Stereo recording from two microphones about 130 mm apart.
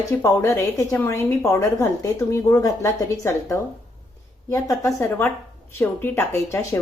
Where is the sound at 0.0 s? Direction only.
25° left (ahead or behind).